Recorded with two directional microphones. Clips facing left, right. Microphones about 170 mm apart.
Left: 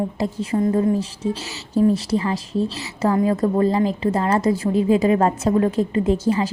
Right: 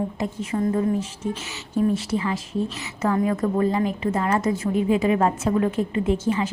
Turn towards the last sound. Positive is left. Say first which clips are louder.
# left 3 dB
turn(degrees=35)  # may be behind; listen again after turning